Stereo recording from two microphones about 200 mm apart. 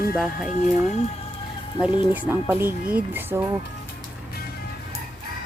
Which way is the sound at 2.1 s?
10° right (ahead or behind).